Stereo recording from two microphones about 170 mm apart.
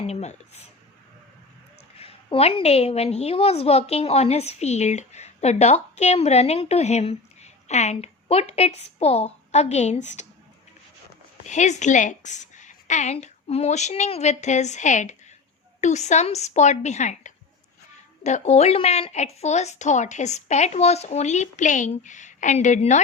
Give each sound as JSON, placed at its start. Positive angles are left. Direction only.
{"t": 0.1, "sound": "speech", "side_deg": 40}
{"t": 2.0, "sound": "a woman's voice", "side_deg": 35}
{"t": 11.4, "sound": "a woman's voice", "side_deg": 45}